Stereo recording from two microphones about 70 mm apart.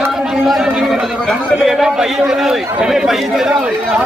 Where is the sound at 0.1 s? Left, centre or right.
Centre.